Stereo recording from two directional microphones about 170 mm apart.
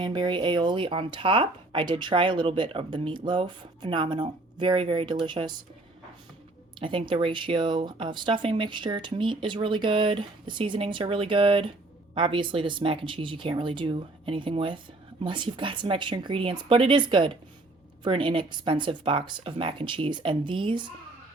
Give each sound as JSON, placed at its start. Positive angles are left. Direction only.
{"t": 0.0, "sound": "speech", "side_deg": -25}
{"t": 6.7, "sound": "speech", "side_deg": -30}